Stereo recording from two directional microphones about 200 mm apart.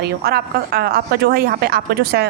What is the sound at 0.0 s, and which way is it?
A woman's voice, 50° right (ahead or behind).